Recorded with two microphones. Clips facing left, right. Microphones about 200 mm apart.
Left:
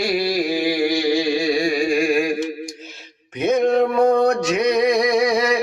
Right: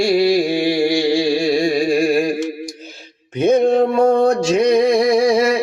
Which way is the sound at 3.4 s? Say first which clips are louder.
Right 3 dB; 30° right (ahead or behind).